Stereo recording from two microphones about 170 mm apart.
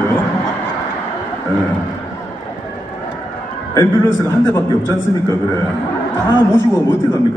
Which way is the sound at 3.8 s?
15° left (ahead or behind).